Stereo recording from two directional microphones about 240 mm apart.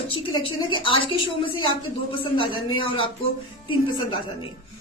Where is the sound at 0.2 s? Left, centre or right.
Left.